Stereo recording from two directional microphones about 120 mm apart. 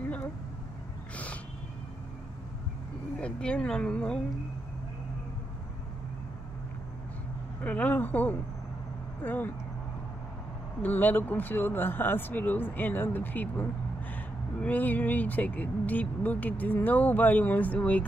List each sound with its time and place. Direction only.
0.0 s vehicle: 15° left (ahead or behind)
1.1 s a sound: 10° left (ahead or behind)
3.2 s speech: 10° left (ahead or behind)
7.6 s speech: 10° left (ahead or behind)
10.8 s speech: 15° left (ahead or behind)